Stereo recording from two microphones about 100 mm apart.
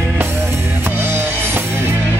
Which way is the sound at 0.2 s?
25° right (ahead or behind).